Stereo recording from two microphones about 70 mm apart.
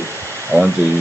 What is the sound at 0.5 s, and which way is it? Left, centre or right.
Speech, left.